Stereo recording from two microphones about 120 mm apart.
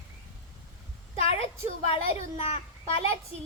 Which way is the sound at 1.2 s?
55° left (ahead or behind).